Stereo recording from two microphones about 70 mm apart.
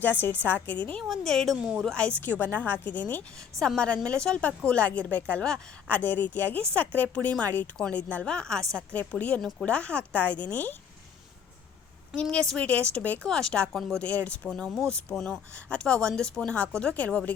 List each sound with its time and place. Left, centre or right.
0.0 s speech: left
1.0 s a woman's voice: centre
2.2 s speech: left
3.6 s a woman's voice: centre
8.9 s speech: left
12.1 s a woman's voice: centre
13.2 s a woman's voice: centre
14.5 s a woman's voice: centre